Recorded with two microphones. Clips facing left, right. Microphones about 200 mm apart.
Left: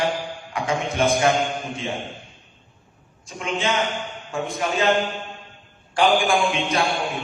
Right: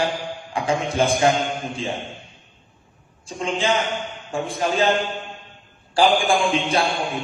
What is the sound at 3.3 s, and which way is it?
A man's voice, 30° right (ahead or behind).